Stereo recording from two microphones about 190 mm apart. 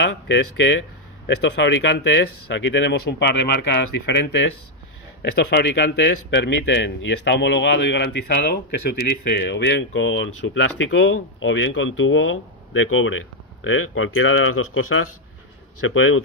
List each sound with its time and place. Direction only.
0.0 s a man's voice: 75° left (ahead or behind); by 16.2 s 90° left